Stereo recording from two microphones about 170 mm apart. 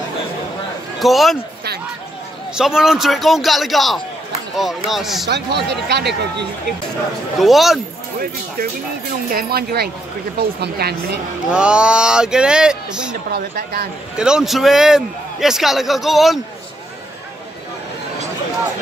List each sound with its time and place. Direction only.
0.9 s a man's voice: centre (ahead or behind)
2.5 s a man's voice: 5° right (ahead or behind)
5.3 s speech: 80° right
7.3 s a man's voice: centre (ahead or behind)
9.3 s speech: 60° right (ahead or behind)
11.5 s a man's voice: 5° right (ahead or behind)
13.3 s speech: 65° right (ahead or behind)
14.1 s a man's voice: 5° right (ahead or behind)